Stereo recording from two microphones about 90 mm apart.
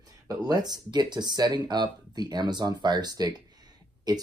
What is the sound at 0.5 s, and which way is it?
Speech, 50° right (ahead or behind).